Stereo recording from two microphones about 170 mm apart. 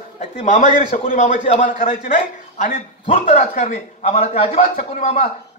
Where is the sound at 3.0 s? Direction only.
40° left (ahead or behind).